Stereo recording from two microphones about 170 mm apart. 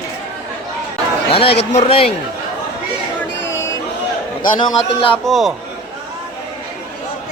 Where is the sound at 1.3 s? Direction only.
35° left (ahead or behind).